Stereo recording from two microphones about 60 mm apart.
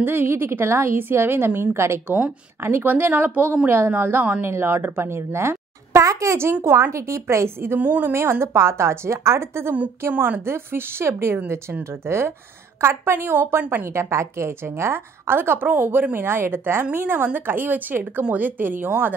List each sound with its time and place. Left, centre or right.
0.0 s a woman's voice: right
3.9 s a woman's voice: right
4.4 s a woman's voice: right
7.8 s speech: right
8.1 s a woman's voice: right
10.0 s a woman's voice: right
13.9 s a woman's voice: right